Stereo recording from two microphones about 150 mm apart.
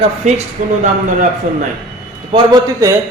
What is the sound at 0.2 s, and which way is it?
Speech, 50° right (ahead or behind).